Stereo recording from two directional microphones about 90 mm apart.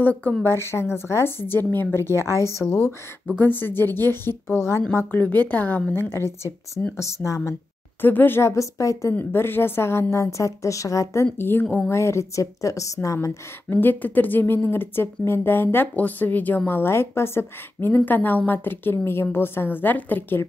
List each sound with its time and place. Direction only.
0.0 s a woman's voice: 20° left (ahead or behind)
3.3 s a woman's voice: 20° left (ahead or behind)
9.1 s speech: 25° left (ahead or behind)
11.3 s a woman's voice: 25° left (ahead or behind)